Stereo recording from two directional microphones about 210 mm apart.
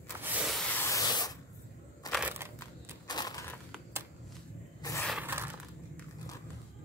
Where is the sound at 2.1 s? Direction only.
10° right (ahead or behind).